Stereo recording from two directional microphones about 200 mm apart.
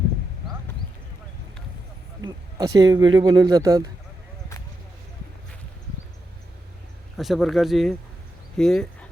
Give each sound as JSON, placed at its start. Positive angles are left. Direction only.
{"t": 2.2, "sound": "speech", "side_deg": -20}
{"t": 7.2, "sound": "speech", "side_deg": 0}